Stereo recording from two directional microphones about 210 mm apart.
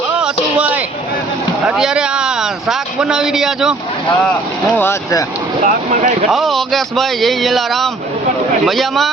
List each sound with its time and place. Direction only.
0.2 s a sound: 5° right (ahead or behind)
1.6 s speech: 5° right (ahead or behind)
4.8 s speech: 10° left (ahead or behind)
5.6 s speech: 35° right (ahead or behind)
6.3 s a man's voice: centre (ahead or behind)